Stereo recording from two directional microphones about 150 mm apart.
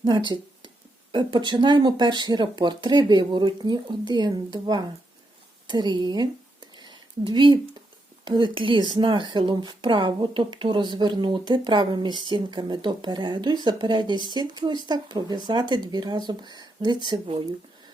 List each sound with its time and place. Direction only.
1.1 s speech: 30° right (ahead or behind)
6.7 s a sound: 30° right (ahead or behind)
8.2 s speech: 30° right (ahead or behind)
17.1 s speech: 40° right (ahead or behind)